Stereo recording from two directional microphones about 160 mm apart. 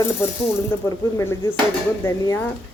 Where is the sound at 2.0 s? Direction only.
10° left (ahead or behind).